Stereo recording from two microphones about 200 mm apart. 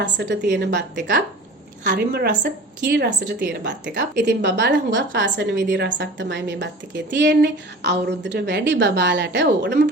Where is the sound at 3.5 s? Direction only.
55° right (ahead or behind).